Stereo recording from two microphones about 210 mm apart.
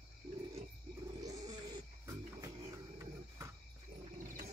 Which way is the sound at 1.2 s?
20° right (ahead or behind).